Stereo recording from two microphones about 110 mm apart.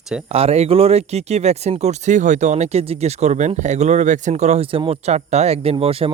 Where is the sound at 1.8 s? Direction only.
90° right.